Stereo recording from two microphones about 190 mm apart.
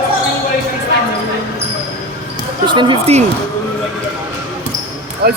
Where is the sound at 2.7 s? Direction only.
25° right (ahead or behind).